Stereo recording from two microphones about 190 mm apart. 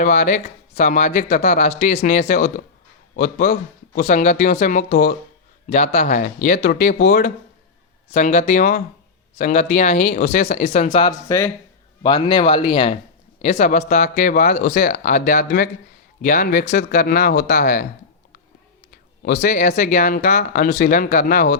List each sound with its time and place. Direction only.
0.0 s speech: 40° left (ahead or behind)
10.9 s speech: 20° left (ahead or behind); by 17.8 s 45° left (ahead or behind)
19.2 s speech: 40° left (ahead or behind)